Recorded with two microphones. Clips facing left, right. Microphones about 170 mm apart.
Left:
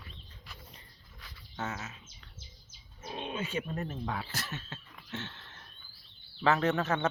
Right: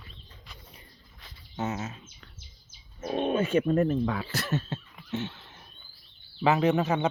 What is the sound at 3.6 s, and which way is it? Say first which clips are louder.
Speech: right 13 dB; 65° right (ahead or behind).